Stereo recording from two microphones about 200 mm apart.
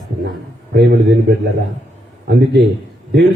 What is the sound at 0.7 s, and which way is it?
Speech, 60° right (ahead or behind).